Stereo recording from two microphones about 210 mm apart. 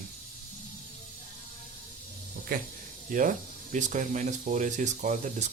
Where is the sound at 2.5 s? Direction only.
45° right (ahead or behind).